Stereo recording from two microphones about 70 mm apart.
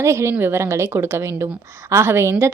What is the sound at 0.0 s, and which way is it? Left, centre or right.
A woman's voice, right.